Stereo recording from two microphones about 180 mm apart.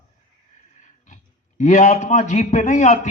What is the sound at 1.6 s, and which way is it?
A man's voice, 40° left (ahead or behind).